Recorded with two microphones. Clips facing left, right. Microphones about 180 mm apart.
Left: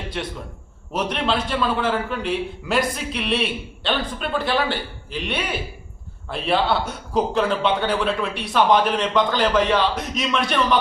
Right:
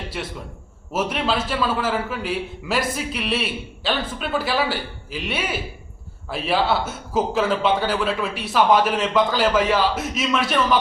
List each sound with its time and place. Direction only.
0.1 s a man's voice: 5° right (ahead or behind)